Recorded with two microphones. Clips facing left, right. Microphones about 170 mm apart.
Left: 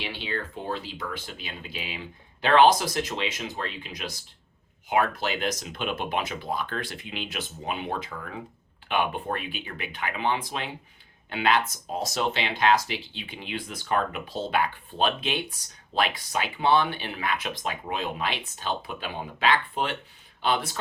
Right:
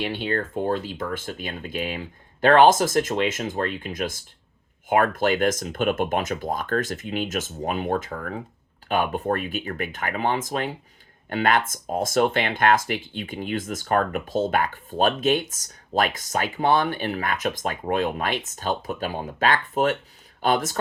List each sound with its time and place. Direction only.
0.0 s speech: 50° right (ahead or behind)